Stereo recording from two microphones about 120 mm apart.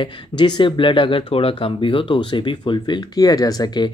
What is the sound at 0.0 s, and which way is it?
Speech, 40° left (ahead or behind).